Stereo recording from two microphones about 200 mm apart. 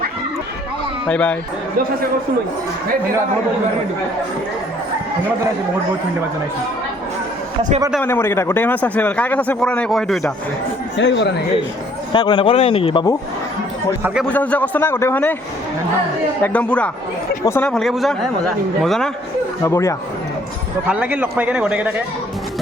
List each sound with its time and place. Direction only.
1.0 s speech: 5° left (ahead or behind)
8.0 s a man's voice: 10° left (ahead or behind)
10.9 s speech: 65° left (ahead or behind)
12.1 s speech: 25° left (ahead or behind)
14.0 s speech: 5° right (ahead or behind)
14.3 s a man's voice: 5° left (ahead or behind)
16.4 s a man's voice: 5° left (ahead or behind)
19.6 s a man's voice: 15° left (ahead or behind)
20.8 s a man's voice: 5° right (ahead or behind)